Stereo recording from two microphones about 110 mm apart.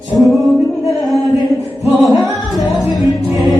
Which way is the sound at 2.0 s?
Centre (ahead or behind).